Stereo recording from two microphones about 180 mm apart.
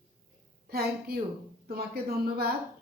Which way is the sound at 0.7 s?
60° right (ahead or behind).